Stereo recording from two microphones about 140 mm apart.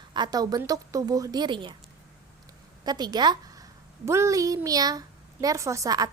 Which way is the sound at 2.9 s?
30° right (ahead or behind).